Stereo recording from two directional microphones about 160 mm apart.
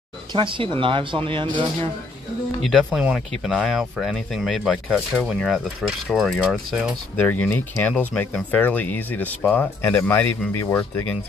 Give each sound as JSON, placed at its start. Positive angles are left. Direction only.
{"t": 0.3, "sound": "speech", "side_deg": -30}
{"t": 2.6, "sound": "speech", "side_deg": 0}
{"t": 7.2, "sound": "speech", "side_deg": 10}